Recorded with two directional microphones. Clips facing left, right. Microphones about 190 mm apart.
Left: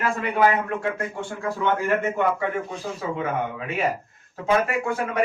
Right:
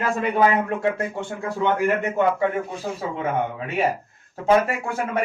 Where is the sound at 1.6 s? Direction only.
15° right (ahead or behind).